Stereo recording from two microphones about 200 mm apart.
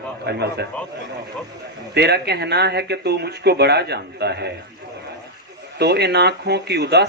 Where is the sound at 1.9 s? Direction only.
55° right (ahead or behind).